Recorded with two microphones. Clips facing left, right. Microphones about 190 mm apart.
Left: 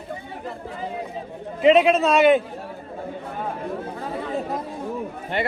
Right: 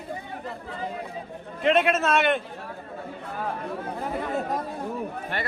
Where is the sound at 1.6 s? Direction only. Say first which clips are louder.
Left 6 dB; centre (ahead or behind).